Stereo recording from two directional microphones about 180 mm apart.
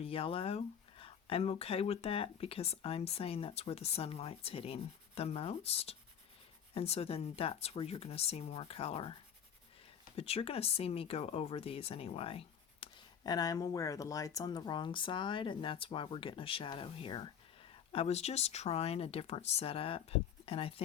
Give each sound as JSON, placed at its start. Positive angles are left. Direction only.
{"t": 0.0, "sound": "speech", "side_deg": 30}
{"t": 10.2, "sound": "speech", "side_deg": 35}